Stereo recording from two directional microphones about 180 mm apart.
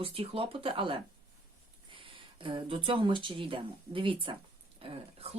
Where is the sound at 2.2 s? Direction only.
30° right (ahead or behind).